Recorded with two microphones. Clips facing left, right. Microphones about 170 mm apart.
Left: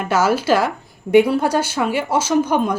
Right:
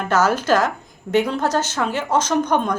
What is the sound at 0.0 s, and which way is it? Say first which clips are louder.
Speech: left 1 dB; 10° left (ahead or behind).